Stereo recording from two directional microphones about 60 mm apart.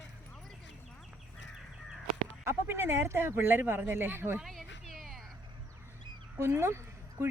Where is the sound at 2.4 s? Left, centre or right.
Right.